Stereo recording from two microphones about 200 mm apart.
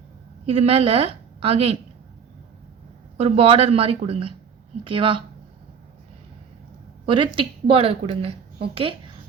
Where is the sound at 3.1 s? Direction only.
30° right (ahead or behind).